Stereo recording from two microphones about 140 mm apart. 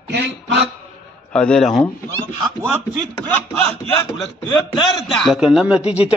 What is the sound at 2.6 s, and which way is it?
Speech, 15° right (ahead or behind).